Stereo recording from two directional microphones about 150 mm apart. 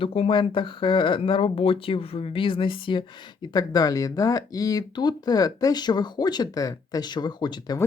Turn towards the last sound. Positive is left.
turn(degrees=25)  # may be behind; listen again after turning